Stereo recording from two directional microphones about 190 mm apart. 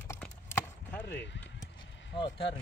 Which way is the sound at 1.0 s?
70° left (ahead or behind).